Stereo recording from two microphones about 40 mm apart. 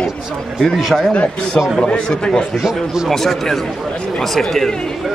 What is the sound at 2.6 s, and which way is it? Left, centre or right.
Speech, centre.